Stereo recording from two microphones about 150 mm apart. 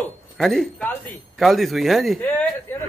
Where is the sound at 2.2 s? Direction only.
10° left (ahead or behind).